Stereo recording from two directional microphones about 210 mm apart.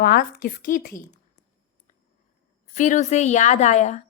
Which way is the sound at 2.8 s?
35° left (ahead or behind).